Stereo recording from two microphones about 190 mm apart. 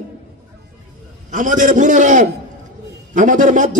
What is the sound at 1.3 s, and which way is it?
A man's voice, 45° right (ahead or behind).